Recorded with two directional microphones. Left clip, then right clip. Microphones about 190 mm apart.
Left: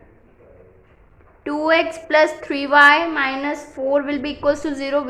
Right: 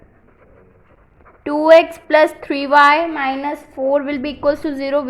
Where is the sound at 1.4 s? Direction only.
25° right (ahead or behind).